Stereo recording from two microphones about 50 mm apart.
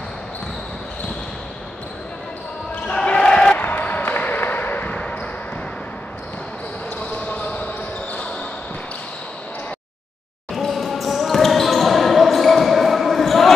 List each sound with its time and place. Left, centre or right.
2.7 s basketball bounce: left
3.5 s a sound: left
7.0 s basketball bounce: left
10.5 s basketball bounce: centre